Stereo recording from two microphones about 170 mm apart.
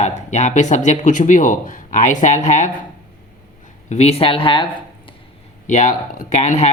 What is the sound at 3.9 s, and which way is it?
Speech, 40° left (ahead or behind).